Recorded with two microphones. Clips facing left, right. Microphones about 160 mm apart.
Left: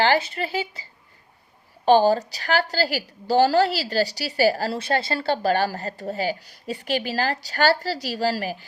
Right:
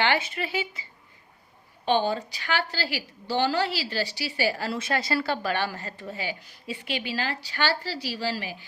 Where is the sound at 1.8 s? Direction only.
40° left (ahead or behind).